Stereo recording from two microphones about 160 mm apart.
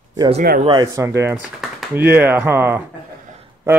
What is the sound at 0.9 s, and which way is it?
A man's voice, 15° right (ahead or behind).